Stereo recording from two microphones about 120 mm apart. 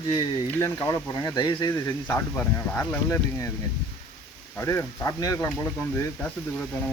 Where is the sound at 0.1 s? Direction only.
40° left (ahead or behind).